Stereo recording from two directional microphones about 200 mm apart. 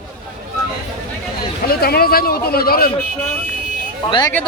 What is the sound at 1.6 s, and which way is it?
Speech, 50° left (ahead or behind).